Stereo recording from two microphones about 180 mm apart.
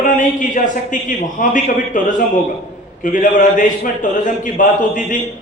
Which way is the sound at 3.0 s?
45° left (ahead or behind).